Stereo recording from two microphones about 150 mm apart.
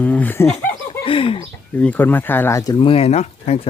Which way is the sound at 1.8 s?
10° left (ahead or behind).